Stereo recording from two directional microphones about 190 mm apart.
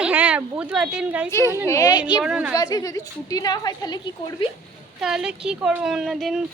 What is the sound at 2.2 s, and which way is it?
Speech, 5° right (ahead or behind).